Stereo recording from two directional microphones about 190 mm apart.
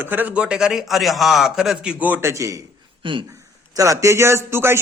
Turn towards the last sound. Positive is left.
turn(degrees=-15)  # may be behind; listen again after turning